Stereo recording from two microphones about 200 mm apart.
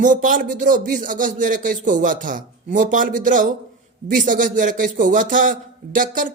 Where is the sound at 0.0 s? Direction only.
40° right (ahead or behind).